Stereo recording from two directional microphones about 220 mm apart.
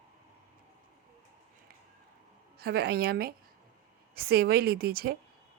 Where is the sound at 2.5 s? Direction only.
45° right (ahead or behind).